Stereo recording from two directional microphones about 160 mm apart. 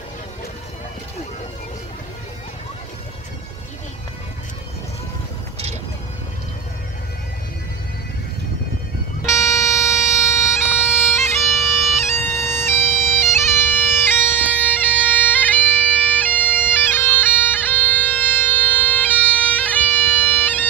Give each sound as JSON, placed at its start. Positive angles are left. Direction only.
{"t": 9.2, "sound": "music", "side_deg": 20}
{"t": 11.1, "sound": "bagpipes", "side_deg": 0}
{"t": 12.1, "sound": "bagpipes", "side_deg": 15}